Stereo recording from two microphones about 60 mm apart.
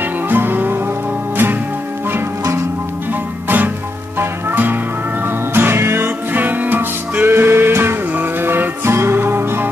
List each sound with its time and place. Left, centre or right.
0.3 s music: right
3.4 s music: right